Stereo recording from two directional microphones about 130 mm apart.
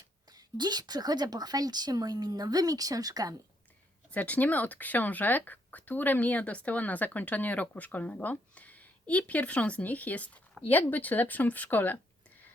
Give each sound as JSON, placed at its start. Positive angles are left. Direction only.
{"t": 0.3, "sound": "a woman's voice", "side_deg": -30}
{"t": 4.1, "sound": "speech", "side_deg": 10}